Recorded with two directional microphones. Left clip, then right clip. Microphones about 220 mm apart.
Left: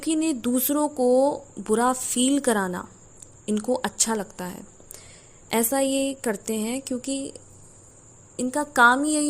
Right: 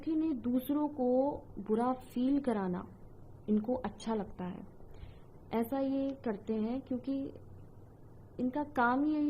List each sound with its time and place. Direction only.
0.0 s speech: 30° left (ahead or behind)